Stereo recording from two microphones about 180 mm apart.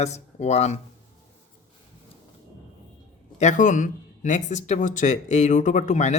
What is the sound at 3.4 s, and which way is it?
Speech, 40° left (ahead or behind).